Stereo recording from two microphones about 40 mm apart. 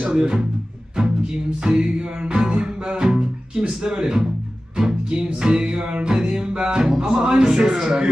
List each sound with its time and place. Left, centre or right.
0.0 s music: centre